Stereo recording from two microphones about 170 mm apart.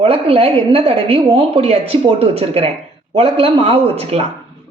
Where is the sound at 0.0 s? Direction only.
35° right (ahead or behind).